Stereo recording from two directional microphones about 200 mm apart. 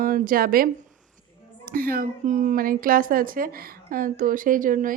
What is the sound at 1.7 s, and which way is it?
A woman's voice, 45° right (ahead or behind).